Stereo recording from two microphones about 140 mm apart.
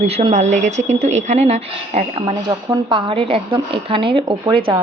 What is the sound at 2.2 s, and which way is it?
Speech, 30° right (ahead or behind).